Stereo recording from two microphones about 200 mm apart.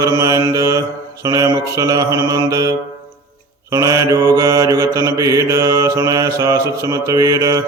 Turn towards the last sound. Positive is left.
turn(degrees=-15)  # may be behind; listen again after turning